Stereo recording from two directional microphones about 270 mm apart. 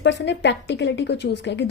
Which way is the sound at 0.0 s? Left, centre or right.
Left.